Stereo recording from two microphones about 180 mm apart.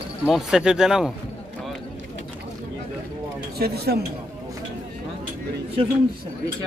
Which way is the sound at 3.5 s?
60° right (ahead or behind).